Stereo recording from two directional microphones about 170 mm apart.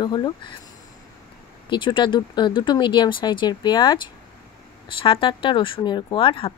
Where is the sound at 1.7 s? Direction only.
30° left (ahead or behind).